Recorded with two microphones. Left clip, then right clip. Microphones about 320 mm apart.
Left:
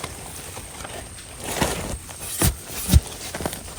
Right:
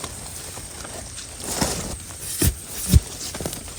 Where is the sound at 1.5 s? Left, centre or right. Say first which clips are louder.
Left 1 dB; left.